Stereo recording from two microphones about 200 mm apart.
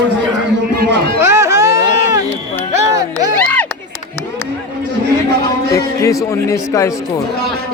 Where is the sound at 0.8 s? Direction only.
50° right (ahead or behind).